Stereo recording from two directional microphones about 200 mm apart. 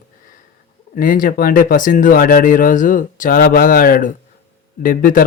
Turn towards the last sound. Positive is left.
turn(degrees=45)  # may be behind; listen again after turning